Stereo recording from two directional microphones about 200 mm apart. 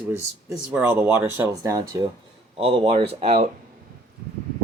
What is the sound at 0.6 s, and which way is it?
Speech, 10° right (ahead or behind).